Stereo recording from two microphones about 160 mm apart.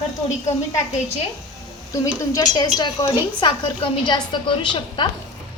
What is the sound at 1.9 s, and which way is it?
A woman's voice, 20° left (ahead or behind).